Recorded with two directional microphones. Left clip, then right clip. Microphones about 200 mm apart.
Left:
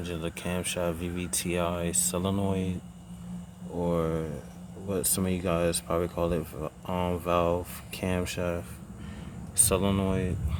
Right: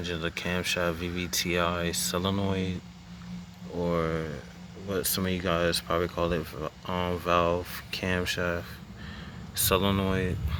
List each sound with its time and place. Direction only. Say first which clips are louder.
0.0 s speech: right 3 dB; 5° left (ahead or behind)
3.8 s speech: even; 10° left (ahead or behind)